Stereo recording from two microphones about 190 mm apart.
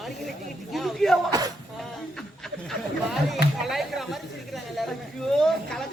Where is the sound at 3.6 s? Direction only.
Centre (ahead or behind).